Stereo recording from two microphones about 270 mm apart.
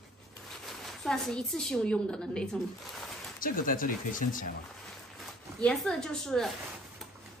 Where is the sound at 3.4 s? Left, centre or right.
Left.